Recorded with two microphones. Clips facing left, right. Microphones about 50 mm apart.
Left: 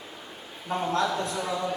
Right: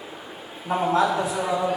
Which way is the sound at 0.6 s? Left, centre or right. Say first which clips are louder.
Right 5 dB; centre.